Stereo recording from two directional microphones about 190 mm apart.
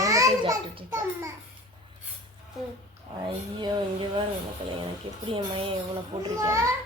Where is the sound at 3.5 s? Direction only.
25° right (ahead or behind).